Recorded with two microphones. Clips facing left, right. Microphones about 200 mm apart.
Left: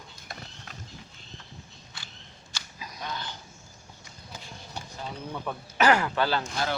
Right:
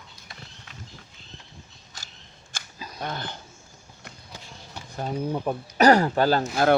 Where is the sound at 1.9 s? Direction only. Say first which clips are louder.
Right 1 dB; 40° right (ahead or behind).